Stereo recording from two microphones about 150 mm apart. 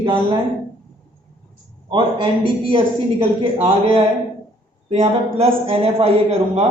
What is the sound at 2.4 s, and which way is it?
Speech, 35° right (ahead or behind).